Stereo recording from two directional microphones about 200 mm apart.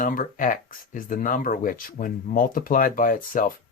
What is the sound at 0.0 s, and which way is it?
Speech, 45° left (ahead or behind).